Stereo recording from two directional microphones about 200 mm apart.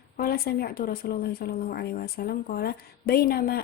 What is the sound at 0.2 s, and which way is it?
Speech, 50° left (ahead or behind).